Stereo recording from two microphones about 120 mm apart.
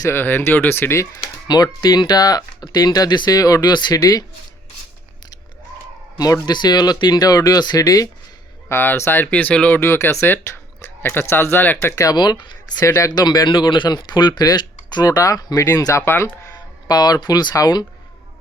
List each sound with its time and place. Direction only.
0.0 s speech: 20° left (ahead or behind)
1.5 s speech: 35° left (ahead or behind)
6.1 s speech: 30° left (ahead or behind)
8.7 s speech: 20° left (ahead or behind); by 12.8 s 35° left (ahead or behind)
12.8 s speech: 25° left (ahead or behind)
16.6 s speech: 35° left (ahead or behind)